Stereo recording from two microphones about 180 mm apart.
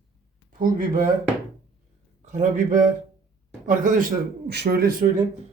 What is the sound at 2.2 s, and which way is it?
A man's voice, 45° right (ahead or behind).